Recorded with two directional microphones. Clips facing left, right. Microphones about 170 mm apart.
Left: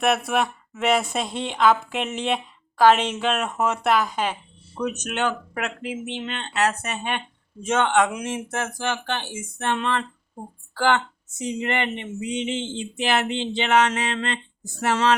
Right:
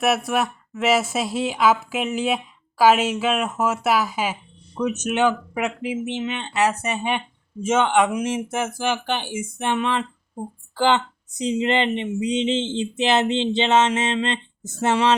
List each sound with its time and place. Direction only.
0.0 s speech: centre (ahead or behind)
10.8 s speech: 20° right (ahead or behind)